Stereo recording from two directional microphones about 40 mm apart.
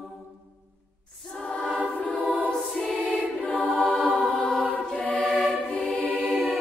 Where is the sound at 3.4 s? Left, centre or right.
Left.